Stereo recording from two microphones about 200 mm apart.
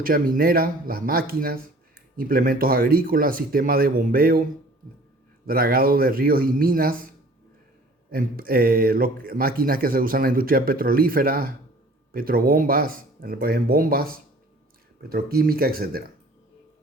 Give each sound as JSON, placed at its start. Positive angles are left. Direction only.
{"t": 0.0, "sound": "speech", "side_deg": -45}
{"t": 5.5, "sound": "speech", "side_deg": -45}
{"t": 8.1, "sound": "speech", "side_deg": -50}